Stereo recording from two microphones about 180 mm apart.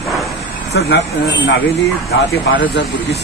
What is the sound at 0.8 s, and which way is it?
Speech, 80° left.